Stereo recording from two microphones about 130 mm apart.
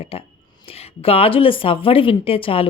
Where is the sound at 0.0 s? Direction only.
45° left (ahead or behind).